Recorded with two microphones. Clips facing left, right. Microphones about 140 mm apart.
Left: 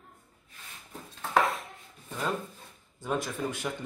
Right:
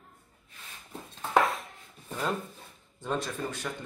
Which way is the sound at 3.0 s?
10° left (ahead or behind).